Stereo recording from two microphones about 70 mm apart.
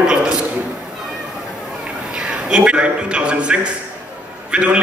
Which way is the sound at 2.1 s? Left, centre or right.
Centre.